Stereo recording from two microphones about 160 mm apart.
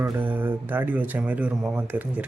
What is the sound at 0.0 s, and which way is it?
Speech, 10° right (ahead or behind).